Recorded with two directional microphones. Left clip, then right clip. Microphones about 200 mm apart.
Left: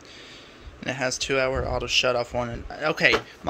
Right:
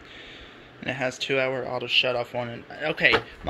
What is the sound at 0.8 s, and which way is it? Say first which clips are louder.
Speech: left 1 dB; 10° left (ahead or behind).